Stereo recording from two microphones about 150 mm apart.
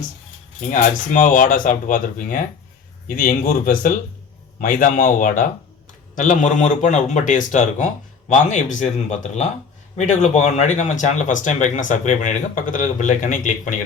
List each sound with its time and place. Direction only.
0.6 s speech: 60° left (ahead or behind)